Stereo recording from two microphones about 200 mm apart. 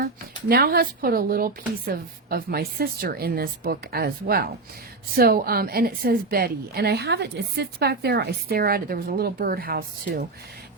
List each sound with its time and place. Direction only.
0.0 s a woman's voice: 50° right (ahead or behind)